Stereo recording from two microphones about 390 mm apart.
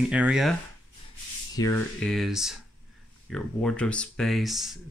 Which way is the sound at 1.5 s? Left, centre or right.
Centre.